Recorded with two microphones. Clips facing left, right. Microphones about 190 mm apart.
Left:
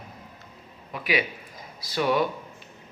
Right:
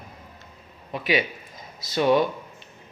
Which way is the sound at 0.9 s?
25° right (ahead or behind).